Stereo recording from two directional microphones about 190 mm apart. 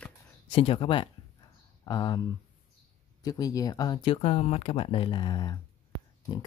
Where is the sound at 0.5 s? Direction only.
30° left (ahead or behind).